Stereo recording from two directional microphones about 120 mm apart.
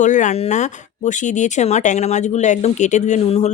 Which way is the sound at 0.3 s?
75° left (ahead or behind).